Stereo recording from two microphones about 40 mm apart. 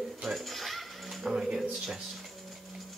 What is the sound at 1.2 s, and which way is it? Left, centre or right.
Music, centre.